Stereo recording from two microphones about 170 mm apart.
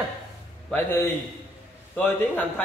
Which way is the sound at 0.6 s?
10° left (ahead or behind).